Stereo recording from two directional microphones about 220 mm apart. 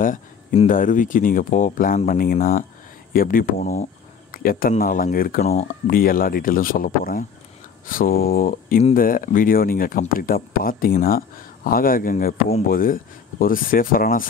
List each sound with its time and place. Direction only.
0.0 s speech: 35° left (ahead or behind)